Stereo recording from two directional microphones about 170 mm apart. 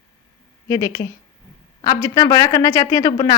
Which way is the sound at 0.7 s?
20° left (ahead or behind).